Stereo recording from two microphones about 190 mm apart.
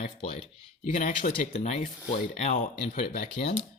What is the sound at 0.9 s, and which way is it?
Speech, 40° left (ahead or behind).